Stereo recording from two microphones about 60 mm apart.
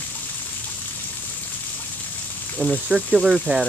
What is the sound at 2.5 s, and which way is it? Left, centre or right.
Speech, centre.